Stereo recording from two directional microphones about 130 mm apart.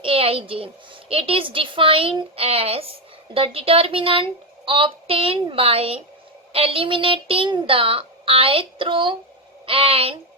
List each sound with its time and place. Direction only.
0.0 s a child's voice: 45° right (ahead or behind)